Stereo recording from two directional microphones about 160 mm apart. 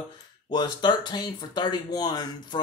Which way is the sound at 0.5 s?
30° left (ahead or behind).